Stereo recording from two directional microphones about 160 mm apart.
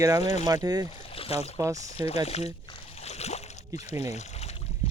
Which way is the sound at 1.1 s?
40° left (ahead or behind).